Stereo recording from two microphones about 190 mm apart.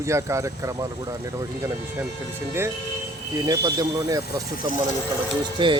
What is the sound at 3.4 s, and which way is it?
Speech, 20° right (ahead or behind).